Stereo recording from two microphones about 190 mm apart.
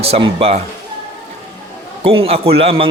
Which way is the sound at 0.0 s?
30° right (ahead or behind).